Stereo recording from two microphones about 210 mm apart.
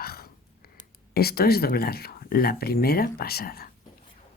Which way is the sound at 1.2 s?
45° left (ahead or behind).